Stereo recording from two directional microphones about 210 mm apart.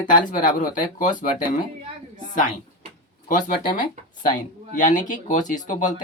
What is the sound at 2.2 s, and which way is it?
Speech, 35° left (ahead or behind).